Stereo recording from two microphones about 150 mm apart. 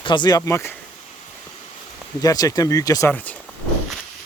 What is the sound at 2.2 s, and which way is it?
Speech, 25° left (ahead or behind).